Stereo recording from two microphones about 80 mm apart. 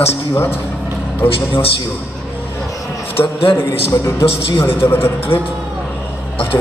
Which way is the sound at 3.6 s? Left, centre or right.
Left.